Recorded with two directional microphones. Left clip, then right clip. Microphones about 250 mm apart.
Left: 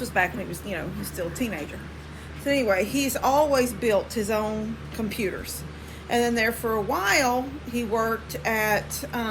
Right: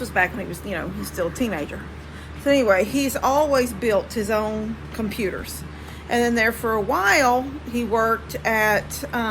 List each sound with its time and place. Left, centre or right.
0.0 s a woman's voice: centre
1.4 s a woman's voice: centre